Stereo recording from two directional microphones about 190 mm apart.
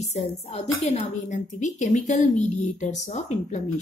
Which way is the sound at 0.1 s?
35° left (ahead or behind).